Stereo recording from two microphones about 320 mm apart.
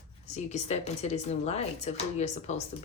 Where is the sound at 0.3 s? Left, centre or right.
Left.